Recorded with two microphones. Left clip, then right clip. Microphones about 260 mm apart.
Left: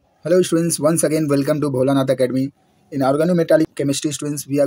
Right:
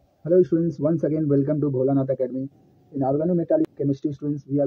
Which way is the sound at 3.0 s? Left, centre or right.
Left.